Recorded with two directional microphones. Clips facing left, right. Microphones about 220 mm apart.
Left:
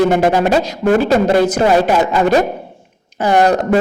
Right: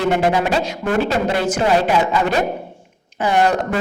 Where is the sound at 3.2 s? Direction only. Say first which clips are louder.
Left 4 dB; 40° left (ahead or behind).